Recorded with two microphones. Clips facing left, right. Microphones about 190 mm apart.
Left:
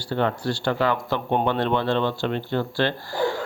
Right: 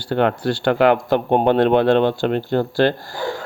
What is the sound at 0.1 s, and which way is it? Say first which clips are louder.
Speech: right 6 dB; 65° right (ahead or behind).